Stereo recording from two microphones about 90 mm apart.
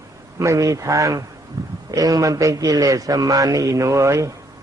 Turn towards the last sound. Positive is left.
turn(degrees=-35)  # may be behind; listen again after turning